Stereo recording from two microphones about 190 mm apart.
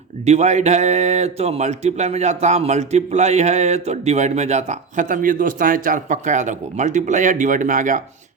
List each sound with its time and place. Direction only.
0.3 s speech: 35° right (ahead or behind)